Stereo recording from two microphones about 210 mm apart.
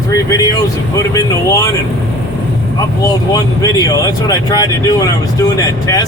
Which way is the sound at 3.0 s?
15° left (ahead or behind).